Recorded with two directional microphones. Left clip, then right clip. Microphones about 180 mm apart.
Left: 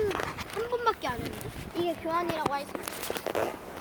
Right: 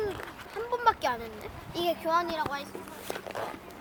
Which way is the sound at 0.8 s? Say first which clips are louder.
Right 5 dB; 25° right (ahead or behind).